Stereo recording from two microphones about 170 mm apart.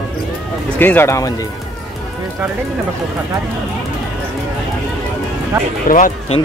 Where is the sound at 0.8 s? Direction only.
10° left (ahead or behind).